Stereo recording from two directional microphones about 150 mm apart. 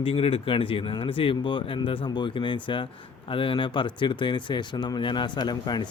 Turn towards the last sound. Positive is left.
turn(degrees=30)  # may be behind; listen again after turning